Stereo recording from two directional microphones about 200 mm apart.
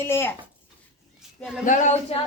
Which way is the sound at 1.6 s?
40° left (ahead or behind).